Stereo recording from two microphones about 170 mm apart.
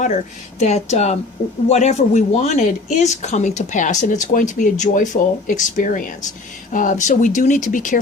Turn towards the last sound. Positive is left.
turn(degrees=50)  # may be behind; listen again after turning